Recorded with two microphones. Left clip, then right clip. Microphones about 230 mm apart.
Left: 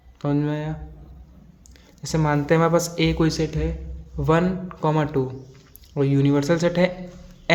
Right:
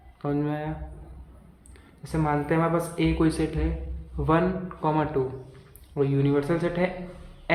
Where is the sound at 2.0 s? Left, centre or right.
Left.